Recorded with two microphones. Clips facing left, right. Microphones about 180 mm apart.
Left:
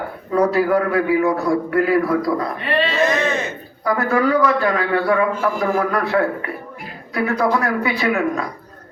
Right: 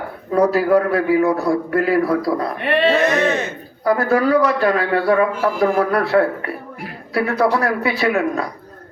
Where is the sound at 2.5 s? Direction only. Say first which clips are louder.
Right 4 dB; 60° right (ahead or behind).